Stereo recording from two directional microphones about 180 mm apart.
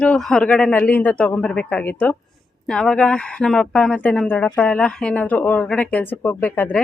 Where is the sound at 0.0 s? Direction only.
5° left (ahead or behind).